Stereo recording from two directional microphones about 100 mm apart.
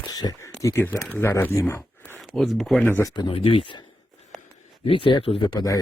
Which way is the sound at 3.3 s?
60° left (ahead or behind).